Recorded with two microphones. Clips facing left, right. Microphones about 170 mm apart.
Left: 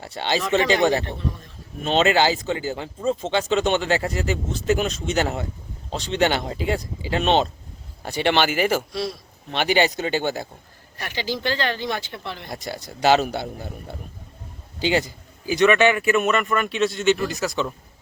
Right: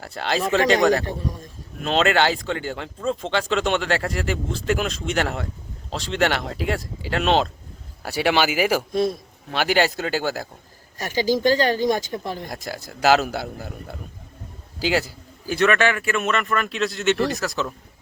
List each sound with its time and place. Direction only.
0.0 s speech: centre (ahead or behind)
1.2 s a man's voice: 40° right (ahead or behind)
1.8 s speech: centre (ahead or behind)
8.9 s a man's voice: 50° right (ahead or behind)
9.5 s speech: 5° right (ahead or behind)
10.9 s speech: 40° right (ahead or behind)
12.5 s a man's voice: centre (ahead or behind)